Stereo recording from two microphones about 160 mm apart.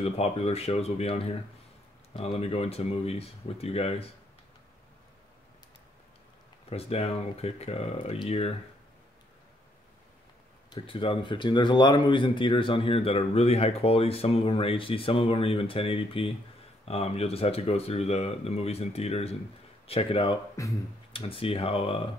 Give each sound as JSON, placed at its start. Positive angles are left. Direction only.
{"t": 0.0, "sound": "speech", "side_deg": 40}
{"t": 6.7, "sound": "speech", "side_deg": 40}
{"t": 10.7, "sound": "speech", "side_deg": 35}
{"t": 20.6, "sound": "speech", "side_deg": 20}
{"t": 21.1, "sound": "speech", "side_deg": 35}